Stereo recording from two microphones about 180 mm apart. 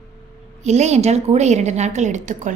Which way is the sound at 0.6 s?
40° right (ahead or behind).